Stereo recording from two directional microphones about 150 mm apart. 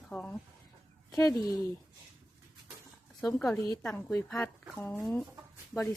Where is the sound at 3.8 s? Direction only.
5° left (ahead or behind).